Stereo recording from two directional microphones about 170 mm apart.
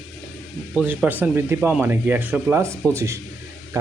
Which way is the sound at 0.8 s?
10° right (ahead or behind).